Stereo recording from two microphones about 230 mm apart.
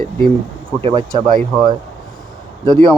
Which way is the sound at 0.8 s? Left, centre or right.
Right.